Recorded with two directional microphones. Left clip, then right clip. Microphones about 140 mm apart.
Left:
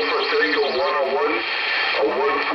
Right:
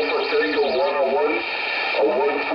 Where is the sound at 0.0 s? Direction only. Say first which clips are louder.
Left 1 dB; 20° left (ahead or behind).